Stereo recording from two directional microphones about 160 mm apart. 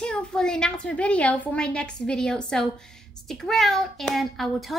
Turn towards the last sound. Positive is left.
turn(degrees=0)  # may be behind; listen again after turning